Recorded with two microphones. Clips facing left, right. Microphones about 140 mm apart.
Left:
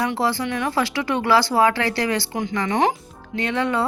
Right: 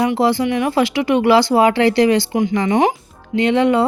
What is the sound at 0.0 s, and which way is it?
A woman's voice, 15° right (ahead or behind).